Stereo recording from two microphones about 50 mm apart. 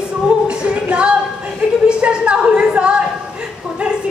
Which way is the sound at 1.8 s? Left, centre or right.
Right.